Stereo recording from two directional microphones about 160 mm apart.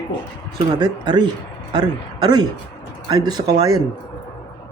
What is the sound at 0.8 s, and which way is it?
A man's voice, 25° right (ahead or behind).